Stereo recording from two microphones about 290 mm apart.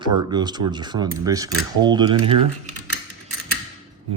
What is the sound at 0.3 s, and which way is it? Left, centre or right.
Cutlery, centre.